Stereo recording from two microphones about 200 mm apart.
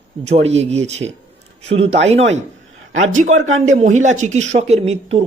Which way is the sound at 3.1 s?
40° right (ahead or behind).